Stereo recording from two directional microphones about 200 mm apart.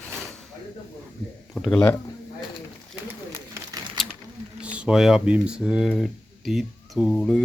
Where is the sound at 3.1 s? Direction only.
15° right (ahead or behind).